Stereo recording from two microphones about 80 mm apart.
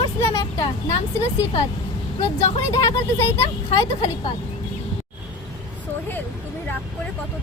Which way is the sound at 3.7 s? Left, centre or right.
Left.